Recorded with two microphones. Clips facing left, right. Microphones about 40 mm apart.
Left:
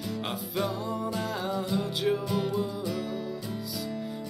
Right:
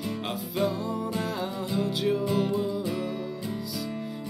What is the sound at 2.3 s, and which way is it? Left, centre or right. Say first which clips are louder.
Music: right 2 dB; centre.